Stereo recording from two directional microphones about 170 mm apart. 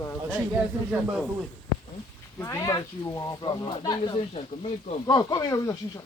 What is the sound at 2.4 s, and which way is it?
Speech, 15° left (ahead or behind).